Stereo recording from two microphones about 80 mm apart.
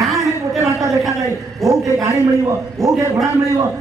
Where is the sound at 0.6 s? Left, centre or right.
Right.